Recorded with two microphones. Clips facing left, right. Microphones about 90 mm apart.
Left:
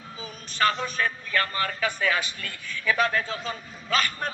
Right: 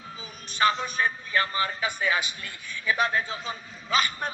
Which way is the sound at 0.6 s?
15° right (ahead or behind).